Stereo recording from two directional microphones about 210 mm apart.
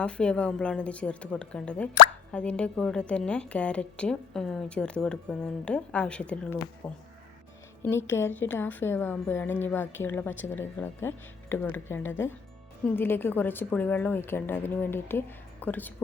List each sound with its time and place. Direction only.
0.0 s a woman's voice: 5° left (ahead or behind)